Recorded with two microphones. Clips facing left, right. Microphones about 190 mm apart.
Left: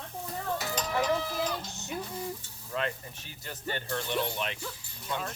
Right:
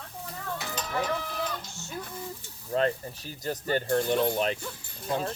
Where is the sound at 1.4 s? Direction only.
15° left (ahead or behind).